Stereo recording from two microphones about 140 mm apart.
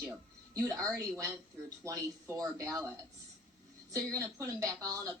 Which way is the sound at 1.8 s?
20° right (ahead or behind).